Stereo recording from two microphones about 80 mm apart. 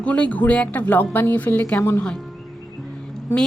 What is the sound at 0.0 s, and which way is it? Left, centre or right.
A woman's voice, centre.